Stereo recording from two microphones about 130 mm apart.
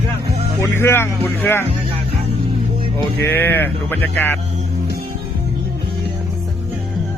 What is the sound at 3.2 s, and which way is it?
Speech, 15° left (ahead or behind).